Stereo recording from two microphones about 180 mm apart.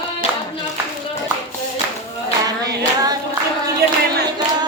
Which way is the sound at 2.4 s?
20° right (ahead or behind).